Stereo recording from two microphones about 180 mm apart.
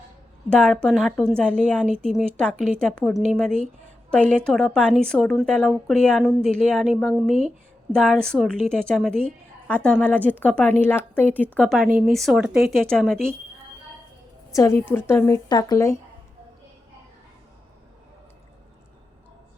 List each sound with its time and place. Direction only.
0.5 s a woman's voice: 5° left (ahead or behind)
14.5 s a woman's voice: 15° left (ahead or behind)